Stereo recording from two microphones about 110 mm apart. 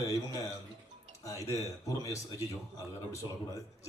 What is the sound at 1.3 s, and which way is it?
Speech, 30° right (ahead or behind).